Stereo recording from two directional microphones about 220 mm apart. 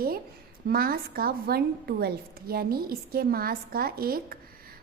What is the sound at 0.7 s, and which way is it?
A woman's voice, 45° right (ahead or behind).